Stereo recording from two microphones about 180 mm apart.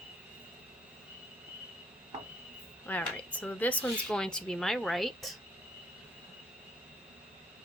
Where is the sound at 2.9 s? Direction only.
10° left (ahead or behind).